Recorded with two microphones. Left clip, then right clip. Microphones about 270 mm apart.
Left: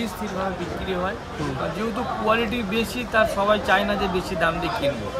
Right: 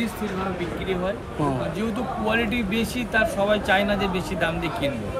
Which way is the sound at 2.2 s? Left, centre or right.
Centre.